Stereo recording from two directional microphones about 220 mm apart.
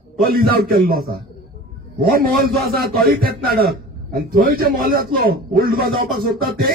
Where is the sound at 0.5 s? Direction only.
45° right (ahead or behind).